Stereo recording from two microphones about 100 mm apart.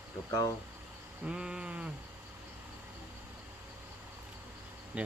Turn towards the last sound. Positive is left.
turn(degrees=-15)  # may be behind; listen again after turning